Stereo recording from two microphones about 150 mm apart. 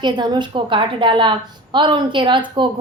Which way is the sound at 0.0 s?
30° right (ahead or behind).